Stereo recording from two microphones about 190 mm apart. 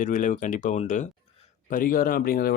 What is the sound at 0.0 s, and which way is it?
Speech, 45° left (ahead or behind).